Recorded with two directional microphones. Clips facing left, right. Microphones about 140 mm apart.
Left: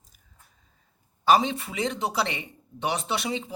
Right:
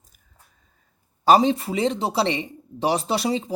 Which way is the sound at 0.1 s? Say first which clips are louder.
Even; 50° right (ahead or behind).